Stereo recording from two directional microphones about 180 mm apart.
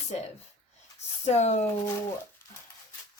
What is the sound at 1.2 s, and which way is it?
Speech, 40° left (ahead or behind).